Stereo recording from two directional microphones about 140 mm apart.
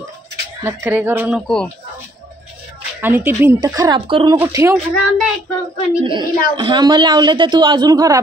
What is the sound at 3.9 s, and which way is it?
Speech, 40° right (ahead or behind).